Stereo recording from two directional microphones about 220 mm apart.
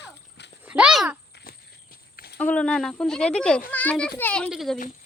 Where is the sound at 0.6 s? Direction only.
5° right (ahead or behind).